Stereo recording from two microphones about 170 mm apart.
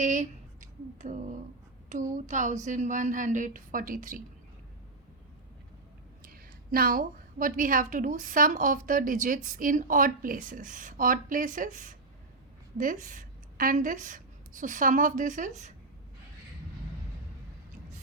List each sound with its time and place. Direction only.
0.0 s a woman's voice: 45° right (ahead or behind)
6.2 s a woman's voice: 60° right (ahead or behind)